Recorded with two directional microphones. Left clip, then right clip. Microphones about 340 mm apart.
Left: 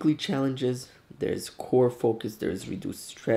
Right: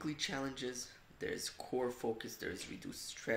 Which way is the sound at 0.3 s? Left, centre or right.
Right.